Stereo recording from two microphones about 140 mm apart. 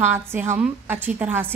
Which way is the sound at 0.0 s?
15° right (ahead or behind).